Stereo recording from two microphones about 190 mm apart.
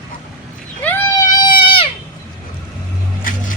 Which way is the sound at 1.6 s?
30° left (ahead or behind).